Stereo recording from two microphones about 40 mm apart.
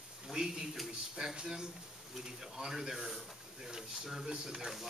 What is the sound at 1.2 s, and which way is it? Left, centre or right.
Speech, centre.